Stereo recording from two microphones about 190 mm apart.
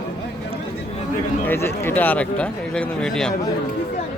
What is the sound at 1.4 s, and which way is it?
Speech, 10° left (ahead or behind).